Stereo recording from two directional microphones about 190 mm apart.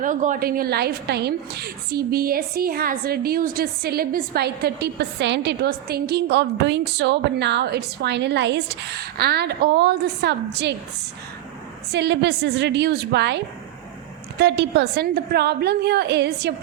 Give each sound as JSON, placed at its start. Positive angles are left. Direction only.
{"t": 0.0, "sound": "a woman's voice", "side_deg": -45}
{"t": 11.9, "sound": "a woman's voice", "side_deg": -65}